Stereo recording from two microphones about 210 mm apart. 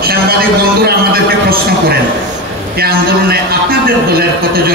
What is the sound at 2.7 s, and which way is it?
A man's voice, 45° right (ahead or behind).